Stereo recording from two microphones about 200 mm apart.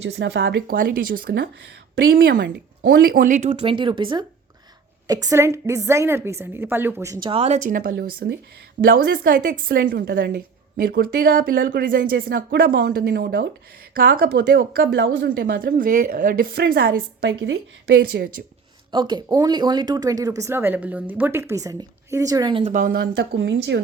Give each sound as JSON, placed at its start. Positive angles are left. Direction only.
{"t": 0.0, "sound": "speech", "side_deg": -65}
{"t": 0.7, "sound": "a woman's voice", "side_deg": -50}
{"t": 3.1, "sound": "a woman's voice", "side_deg": -45}
{"t": 10.9, "sound": "a woman's voice", "side_deg": -45}
{"t": 11.5, "sound": "a woman's voice", "side_deg": -60}
{"t": 18.2, "sound": "speech", "side_deg": -55}
{"t": 18.9, "sound": "speech", "side_deg": -20}
{"t": 22.7, "sound": "a woman's voice", "side_deg": -45}